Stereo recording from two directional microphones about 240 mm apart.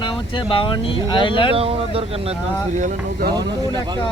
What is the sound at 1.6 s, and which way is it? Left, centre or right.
Speech, right.